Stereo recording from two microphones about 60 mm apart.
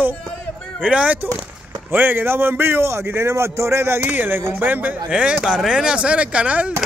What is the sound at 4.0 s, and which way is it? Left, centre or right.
Speech, right.